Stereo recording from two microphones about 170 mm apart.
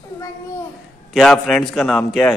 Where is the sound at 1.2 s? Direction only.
Centre (ahead or behind).